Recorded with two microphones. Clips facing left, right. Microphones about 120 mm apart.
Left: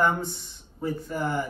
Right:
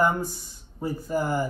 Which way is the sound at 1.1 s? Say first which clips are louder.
Right 5 dB; 5° right (ahead or behind).